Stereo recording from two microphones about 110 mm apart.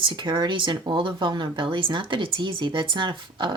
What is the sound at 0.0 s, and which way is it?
Speech, 45° right (ahead or behind).